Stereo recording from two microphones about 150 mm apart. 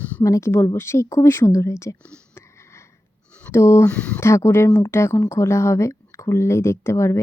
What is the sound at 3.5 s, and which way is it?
Speech, 20° left (ahead or behind).